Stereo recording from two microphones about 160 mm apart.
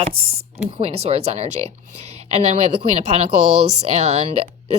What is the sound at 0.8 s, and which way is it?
A woman's voice, 40° right (ahead or behind).